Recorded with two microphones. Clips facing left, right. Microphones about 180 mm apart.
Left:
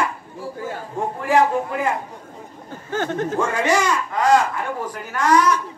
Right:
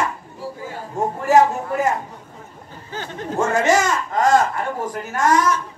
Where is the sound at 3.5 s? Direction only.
45° right (ahead or behind).